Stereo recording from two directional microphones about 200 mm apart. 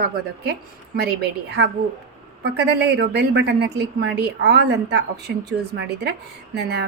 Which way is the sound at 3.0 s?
55° right (ahead or behind).